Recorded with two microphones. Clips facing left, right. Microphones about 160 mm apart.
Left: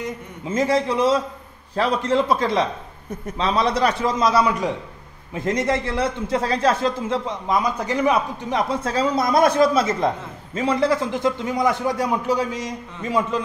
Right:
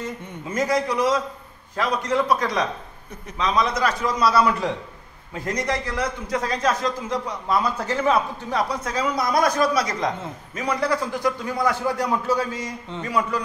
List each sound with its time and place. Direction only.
0.0 s a man's voice: 25° left (ahead or behind)
4.2 s a man's voice: 20° left (ahead or behind)